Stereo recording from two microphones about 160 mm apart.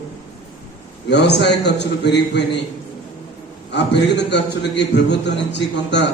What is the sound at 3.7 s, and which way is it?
A man's voice, 90° left.